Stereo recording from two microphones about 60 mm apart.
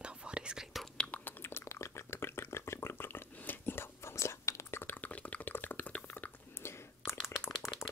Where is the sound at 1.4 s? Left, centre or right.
Left.